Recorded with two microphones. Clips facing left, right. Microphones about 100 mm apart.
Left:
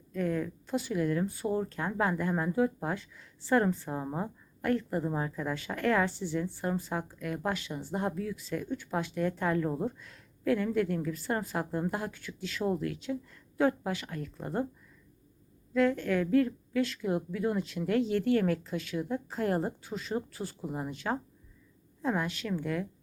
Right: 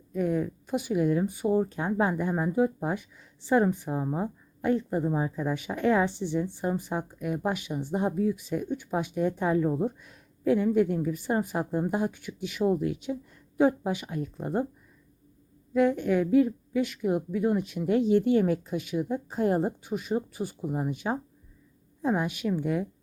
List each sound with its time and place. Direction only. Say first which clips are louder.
0.1 s speech: right 4 dB; 15° right (ahead or behind)
15.7 s a woman's voice: right 3 dB; 15° right (ahead or behind)